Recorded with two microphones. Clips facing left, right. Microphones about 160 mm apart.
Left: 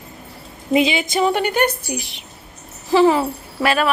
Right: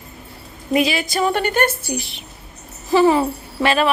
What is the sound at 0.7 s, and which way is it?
A woman's voice, 20° left (ahead or behind).